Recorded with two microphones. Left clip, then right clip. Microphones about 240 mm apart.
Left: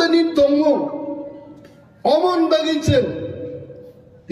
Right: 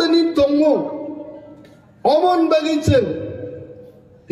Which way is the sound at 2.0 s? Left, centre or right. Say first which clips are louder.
Right 1 dB; centre.